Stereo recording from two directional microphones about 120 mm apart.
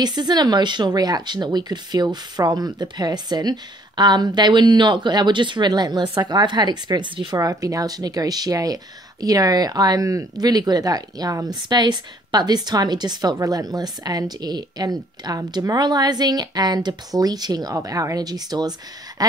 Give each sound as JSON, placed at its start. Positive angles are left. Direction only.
{"t": 0.0, "sound": "speech", "side_deg": -35}
{"t": 7.3, "sound": "speech", "side_deg": -30}